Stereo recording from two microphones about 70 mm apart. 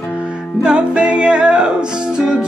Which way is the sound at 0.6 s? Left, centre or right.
Centre.